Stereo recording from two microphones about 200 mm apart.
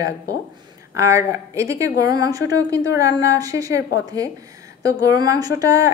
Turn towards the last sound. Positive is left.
turn(degrees=-15)  # may be behind; listen again after turning